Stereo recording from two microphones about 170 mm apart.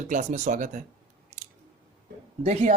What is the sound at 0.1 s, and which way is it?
Speech, 45° right (ahead or behind).